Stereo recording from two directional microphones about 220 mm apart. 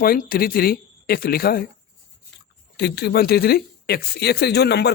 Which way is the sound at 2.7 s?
50° left (ahead or behind).